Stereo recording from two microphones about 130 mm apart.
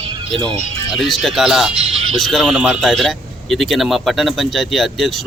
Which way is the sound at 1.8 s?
55° right (ahead or behind).